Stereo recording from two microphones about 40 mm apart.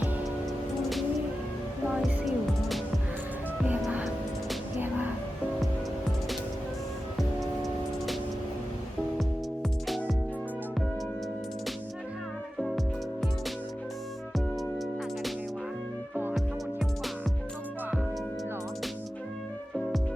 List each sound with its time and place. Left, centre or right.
2.0 s music: centre
7.2 s music: centre
12.5 s music: centre